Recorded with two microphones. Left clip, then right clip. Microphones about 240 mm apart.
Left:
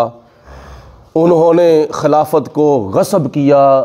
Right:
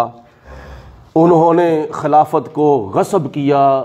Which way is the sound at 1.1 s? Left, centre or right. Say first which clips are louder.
Left 1 dB; left.